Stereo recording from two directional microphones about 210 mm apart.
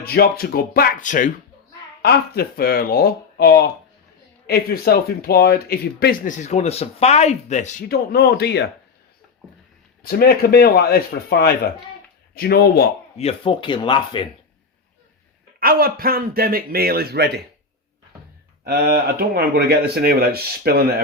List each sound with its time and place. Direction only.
0.0 s speech: 50° left (ahead or behind)
2.0 s speech: 50° left (ahead or behind)
10.0 s speech: 45° left (ahead or behind)
13.1 s speech: 25° left (ahead or behind)
15.6 s speech: 45° right (ahead or behind)
18.6 s speech: 45° right (ahead or behind)